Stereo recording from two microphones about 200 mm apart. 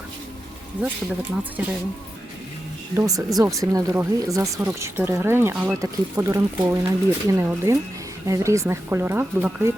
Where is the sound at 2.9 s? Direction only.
15° right (ahead or behind).